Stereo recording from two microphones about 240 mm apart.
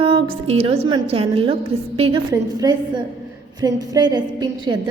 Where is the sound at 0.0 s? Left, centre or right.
Right.